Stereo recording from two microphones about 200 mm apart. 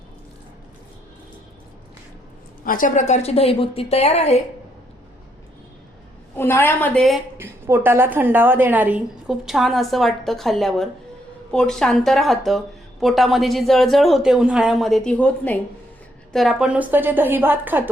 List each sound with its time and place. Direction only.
2.6 s a woman's voice: 40° left (ahead or behind)
6.3 s a woman's voice: 10° left (ahead or behind)
7.3 s a woman's voice: 10° right (ahead or behind)